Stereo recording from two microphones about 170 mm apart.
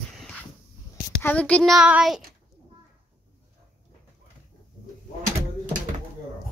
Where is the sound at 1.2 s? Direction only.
10° left (ahead or behind).